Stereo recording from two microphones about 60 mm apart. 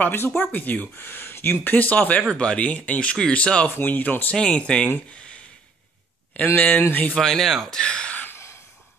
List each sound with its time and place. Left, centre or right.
0.0 s speech: left
2.3 s speech: centre
3.6 s speech: left
4.4 s speech: centre
4.8 s speech: left
6.3 s speech: left
7.2 s speech: centre
7.8 s a sound: centre